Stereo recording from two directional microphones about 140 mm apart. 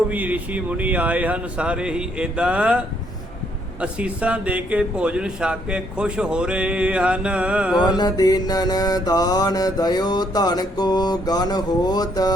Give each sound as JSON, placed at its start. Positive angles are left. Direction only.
{"t": 0.1, "sound": "a man's voice", "side_deg": -10}
{"t": 7.9, "sound": "mantra", "side_deg": 30}